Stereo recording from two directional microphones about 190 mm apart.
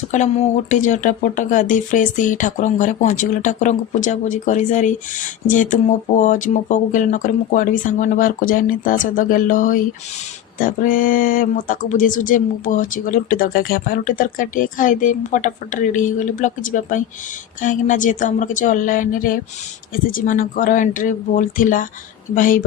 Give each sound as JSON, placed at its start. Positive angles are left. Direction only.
{"t": 0.1, "sound": "speech", "side_deg": 35}